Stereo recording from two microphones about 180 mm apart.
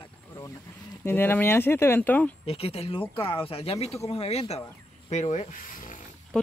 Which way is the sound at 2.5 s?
30° left (ahead or behind).